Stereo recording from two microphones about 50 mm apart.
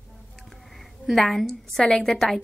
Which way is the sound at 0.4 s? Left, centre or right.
Centre.